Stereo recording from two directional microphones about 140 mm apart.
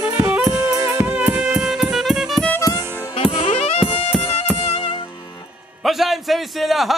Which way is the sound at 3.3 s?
40° left (ahead or behind).